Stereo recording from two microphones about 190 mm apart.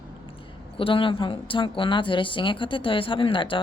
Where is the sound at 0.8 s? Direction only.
30° left (ahead or behind).